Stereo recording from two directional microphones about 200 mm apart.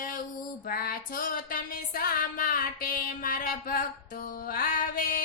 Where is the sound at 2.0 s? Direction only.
45° left (ahead or behind).